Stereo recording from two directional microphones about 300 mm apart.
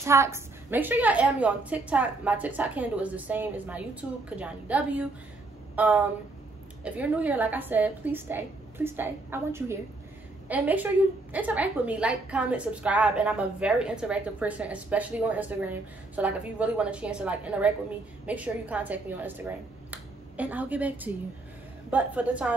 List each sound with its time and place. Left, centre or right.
0.0 s a woman's voice: centre